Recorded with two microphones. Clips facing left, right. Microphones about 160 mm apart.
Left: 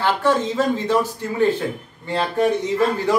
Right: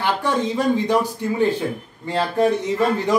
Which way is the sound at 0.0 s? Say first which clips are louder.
Left 3 dB; 15° right (ahead or behind).